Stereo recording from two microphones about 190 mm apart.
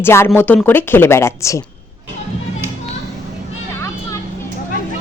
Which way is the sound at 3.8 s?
15° left (ahead or behind).